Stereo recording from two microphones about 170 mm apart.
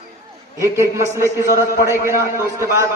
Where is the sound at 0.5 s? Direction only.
15° right (ahead or behind).